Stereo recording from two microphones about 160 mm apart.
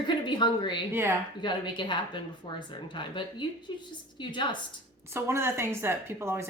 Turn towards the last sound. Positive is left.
turn(degrees=-15)  # may be behind; listen again after turning